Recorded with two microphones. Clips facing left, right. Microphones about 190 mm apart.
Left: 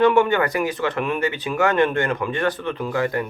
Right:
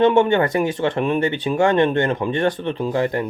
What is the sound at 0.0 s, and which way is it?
Speech, 25° right (ahead or behind).